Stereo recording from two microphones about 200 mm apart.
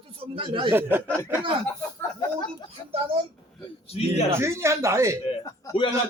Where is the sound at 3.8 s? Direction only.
30° left (ahead or behind).